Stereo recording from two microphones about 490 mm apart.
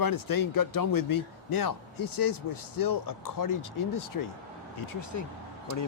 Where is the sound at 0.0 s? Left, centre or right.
Left.